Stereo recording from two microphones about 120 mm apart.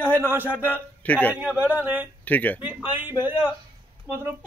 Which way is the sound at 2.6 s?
15° right (ahead or behind).